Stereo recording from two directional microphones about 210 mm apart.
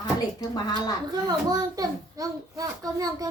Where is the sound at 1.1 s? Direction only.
20° right (ahead or behind).